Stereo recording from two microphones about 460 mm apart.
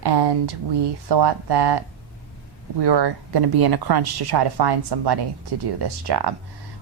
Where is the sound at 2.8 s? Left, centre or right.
Right.